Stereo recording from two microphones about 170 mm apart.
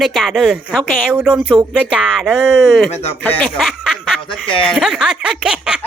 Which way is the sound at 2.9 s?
40° left (ahead or behind).